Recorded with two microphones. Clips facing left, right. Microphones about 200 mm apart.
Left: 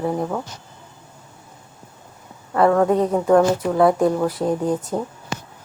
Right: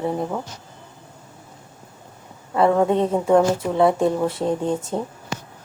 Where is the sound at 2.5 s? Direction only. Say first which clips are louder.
Left 1 dB; 15° right (ahead or behind).